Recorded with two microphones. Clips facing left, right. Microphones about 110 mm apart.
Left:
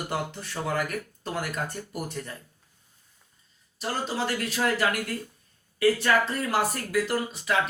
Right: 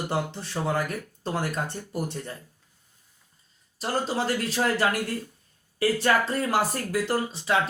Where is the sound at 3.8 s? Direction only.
35° right (ahead or behind).